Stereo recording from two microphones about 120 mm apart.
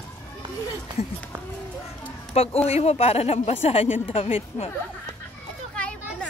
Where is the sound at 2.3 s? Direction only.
55° left (ahead or behind).